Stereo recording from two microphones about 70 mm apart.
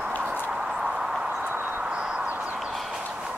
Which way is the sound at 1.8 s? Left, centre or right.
Centre.